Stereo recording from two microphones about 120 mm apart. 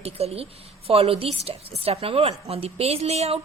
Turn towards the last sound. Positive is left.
turn(degrees=-60)  # may be behind; listen again after turning